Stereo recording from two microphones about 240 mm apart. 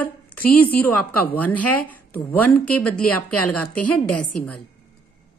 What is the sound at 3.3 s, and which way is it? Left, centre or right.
A woman's voice, left.